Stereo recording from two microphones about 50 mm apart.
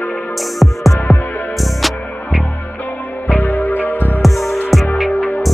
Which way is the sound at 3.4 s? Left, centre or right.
Left.